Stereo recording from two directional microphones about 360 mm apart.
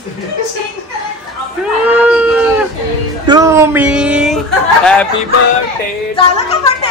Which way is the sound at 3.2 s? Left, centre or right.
Centre.